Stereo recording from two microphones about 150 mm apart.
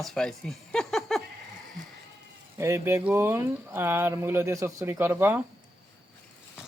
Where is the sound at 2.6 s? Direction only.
15° right (ahead or behind).